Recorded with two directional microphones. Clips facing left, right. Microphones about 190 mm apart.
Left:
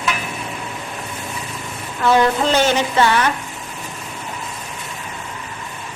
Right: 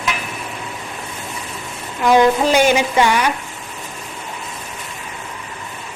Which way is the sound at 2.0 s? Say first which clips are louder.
Right 3 dB; 15° right (ahead or behind).